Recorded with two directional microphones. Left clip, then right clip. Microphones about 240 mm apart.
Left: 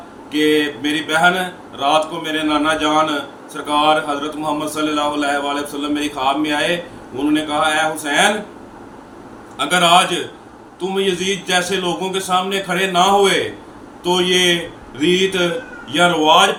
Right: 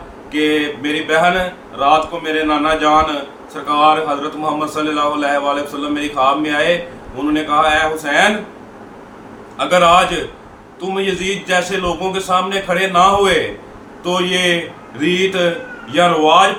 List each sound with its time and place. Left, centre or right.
0.3 s a man's voice: centre
9.6 s a man's voice: centre